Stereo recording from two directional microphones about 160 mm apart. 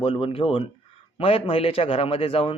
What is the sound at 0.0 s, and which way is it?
A man's voice, 35° left (ahead or behind).